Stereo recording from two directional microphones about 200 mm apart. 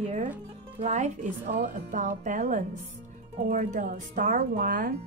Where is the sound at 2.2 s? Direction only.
40° right (ahead or behind).